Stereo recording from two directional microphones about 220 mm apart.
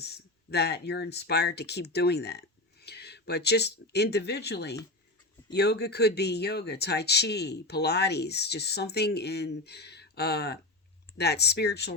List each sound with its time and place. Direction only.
0.0 s speech: 50° left (ahead or behind)